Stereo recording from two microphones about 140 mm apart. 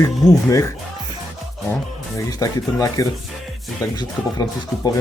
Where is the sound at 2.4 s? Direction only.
25° left (ahead or behind).